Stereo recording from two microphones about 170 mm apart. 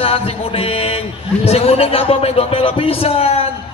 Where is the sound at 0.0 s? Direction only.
35° left (ahead or behind).